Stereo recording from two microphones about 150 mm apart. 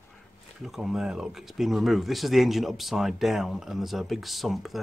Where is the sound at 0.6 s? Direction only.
Centre (ahead or behind).